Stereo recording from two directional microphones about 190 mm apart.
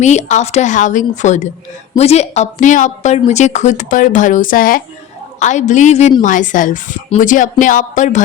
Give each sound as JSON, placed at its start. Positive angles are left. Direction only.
{"t": 0.0, "sound": "a woman's voice", "side_deg": 35}